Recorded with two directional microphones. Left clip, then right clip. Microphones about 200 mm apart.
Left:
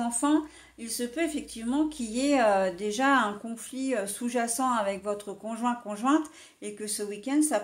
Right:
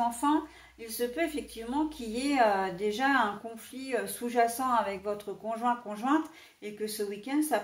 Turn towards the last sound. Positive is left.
turn(degrees=50)  # may be behind; listen again after turning